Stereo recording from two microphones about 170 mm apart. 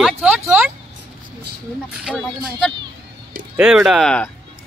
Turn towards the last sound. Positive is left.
turn(degrees=5)  # may be behind; listen again after turning